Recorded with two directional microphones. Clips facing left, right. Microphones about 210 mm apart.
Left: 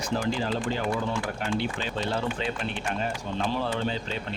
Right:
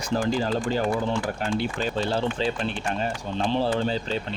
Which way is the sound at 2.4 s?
30° right (ahead or behind).